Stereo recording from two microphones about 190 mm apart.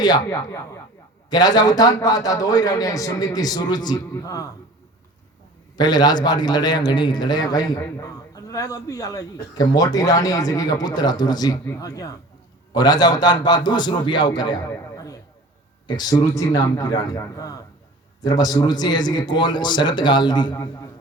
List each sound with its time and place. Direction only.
0.0 s a man's voice: 20° left (ahead or behind)
5.7 s a man's voice: 20° left (ahead or behind)
14.7 s a sound: 15° left (ahead or behind)
15.9 s a man's voice: 20° left (ahead or behind)